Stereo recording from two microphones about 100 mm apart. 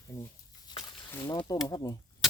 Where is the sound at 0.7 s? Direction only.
50° left (ahead or behind).